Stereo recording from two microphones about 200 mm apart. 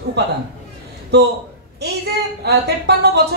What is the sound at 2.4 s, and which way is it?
Speech, 55° right (ahead or behind).